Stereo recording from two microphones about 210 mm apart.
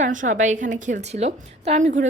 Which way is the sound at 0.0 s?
35° right (ahead or behind).